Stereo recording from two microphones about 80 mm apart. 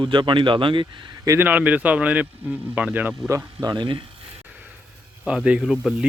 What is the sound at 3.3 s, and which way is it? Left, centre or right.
Speech, right.